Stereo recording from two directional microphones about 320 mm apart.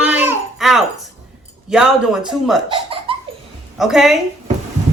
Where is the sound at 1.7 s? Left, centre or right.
Centre.